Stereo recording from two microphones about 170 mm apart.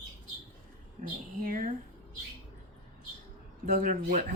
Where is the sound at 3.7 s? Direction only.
50° right (ahead or behind).